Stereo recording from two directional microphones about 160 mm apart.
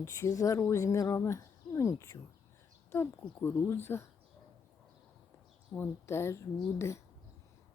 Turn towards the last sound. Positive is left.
turn(degrees=15)  # may be behind; listen again after turning